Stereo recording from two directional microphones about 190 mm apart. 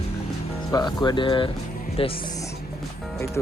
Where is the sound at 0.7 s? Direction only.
20° left (ahead or behind).